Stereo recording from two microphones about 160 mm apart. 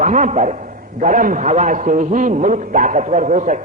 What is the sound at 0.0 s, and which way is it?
A man's voice, 50° right (ahead or behind).